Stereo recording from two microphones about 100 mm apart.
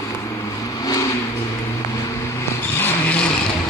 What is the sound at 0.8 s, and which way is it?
Vehicle, 40° left (ahead or behind).